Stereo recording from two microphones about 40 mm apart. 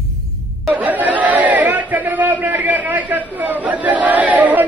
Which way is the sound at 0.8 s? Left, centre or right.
Right.